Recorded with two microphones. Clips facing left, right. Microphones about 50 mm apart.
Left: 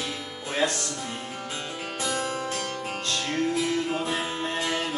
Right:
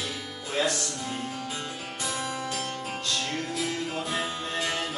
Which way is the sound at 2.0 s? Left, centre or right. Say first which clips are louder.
Left 3 dB; left.